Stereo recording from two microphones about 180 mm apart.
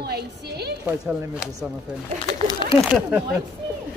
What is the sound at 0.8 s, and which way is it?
Speech, 5° right (ahead or behind).